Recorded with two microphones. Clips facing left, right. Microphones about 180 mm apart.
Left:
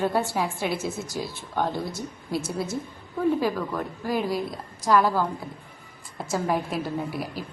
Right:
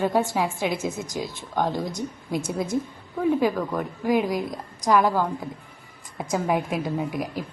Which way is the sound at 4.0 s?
15° right (ahead or behind).